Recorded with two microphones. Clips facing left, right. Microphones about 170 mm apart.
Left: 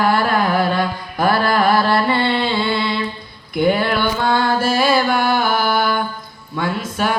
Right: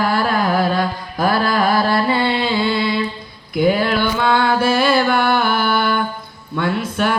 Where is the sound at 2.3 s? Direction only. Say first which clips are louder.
Even; 55° left (ahead or behind).